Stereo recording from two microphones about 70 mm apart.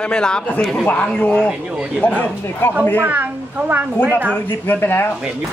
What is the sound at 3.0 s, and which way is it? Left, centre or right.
A woman's voice, right.